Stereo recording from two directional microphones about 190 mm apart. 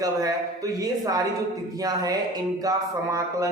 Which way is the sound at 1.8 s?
20° right (ahead or behind).